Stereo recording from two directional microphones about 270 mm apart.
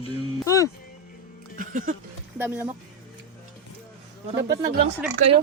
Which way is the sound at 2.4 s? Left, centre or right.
Centre.